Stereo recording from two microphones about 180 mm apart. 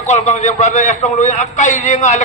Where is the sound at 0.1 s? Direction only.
40° left (ahead or behind).